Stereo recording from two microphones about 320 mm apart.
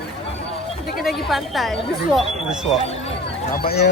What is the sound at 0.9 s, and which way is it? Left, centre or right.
Speech, centre.